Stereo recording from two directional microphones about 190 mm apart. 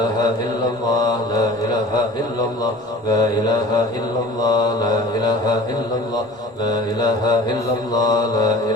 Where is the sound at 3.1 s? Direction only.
20° left (ahead or behind).